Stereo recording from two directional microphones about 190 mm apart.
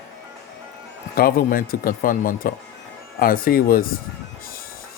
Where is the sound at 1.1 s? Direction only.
50° left (ahead or behind).